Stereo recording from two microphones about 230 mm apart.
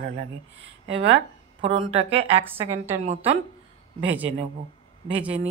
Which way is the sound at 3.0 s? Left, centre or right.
Right.